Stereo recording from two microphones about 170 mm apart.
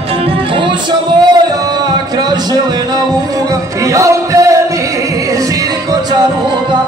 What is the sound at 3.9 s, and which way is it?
Music, 20° right (ahead or behind).